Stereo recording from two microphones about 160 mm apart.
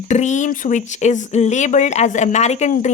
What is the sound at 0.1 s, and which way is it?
Speech, 50° left (ahead or behind).